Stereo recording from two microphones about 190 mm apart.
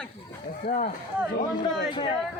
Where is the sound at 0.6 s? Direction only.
40° left (ahead or behind).